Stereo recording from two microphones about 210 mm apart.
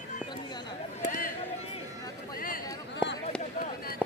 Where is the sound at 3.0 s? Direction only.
5° right (ahead or behind).